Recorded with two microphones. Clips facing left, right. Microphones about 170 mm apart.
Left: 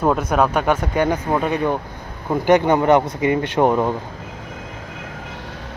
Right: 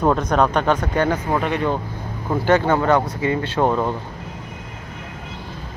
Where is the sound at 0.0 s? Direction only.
5° left (ahead or behind).